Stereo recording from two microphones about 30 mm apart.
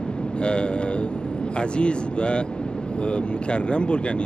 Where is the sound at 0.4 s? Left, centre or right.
Left.